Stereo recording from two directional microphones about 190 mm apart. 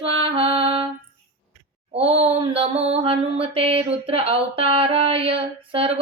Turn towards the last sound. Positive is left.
turn(degrees=-30)  # may be behind; listen again after turning